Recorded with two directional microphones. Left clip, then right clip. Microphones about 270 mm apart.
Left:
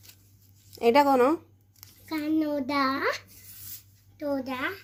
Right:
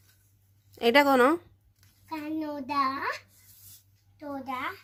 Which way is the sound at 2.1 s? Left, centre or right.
Centre.